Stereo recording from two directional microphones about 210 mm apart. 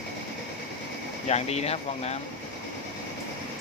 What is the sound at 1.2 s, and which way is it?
Speech, 30° left (ahead or behind).